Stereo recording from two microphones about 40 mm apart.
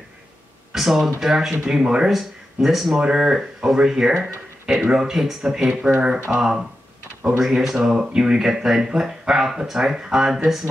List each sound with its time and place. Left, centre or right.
0.7 s speech: centre
1.7 s a sound: centre
2.0 s speech: centre
3.0 s speech: centre
6.0 s a sound: right
7.3 s speech: centre